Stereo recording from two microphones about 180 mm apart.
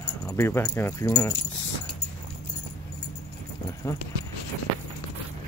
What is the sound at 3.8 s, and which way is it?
Speech, 20° left (ahead or behind).